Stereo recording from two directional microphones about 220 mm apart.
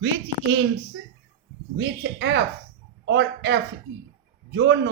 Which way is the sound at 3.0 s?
50° right (ahead or behind).